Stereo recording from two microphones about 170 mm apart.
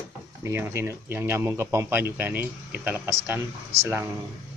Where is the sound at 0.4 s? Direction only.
15° right (ahead or behind).